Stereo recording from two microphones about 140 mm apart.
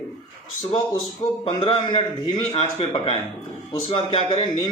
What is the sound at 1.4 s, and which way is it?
Speech, 40° left (ahead or behind).